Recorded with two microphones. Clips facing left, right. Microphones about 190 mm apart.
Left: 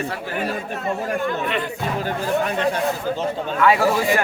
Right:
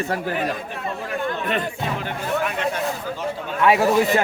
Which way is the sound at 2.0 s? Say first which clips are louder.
Left 4 dB; 35° left (ahead or behind).